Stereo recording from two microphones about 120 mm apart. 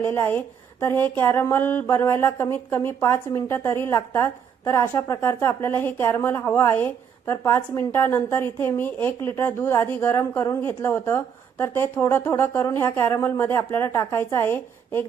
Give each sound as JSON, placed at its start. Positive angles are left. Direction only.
{"t": 0.0, "sound": "a woman's voice", "side_deg": 20}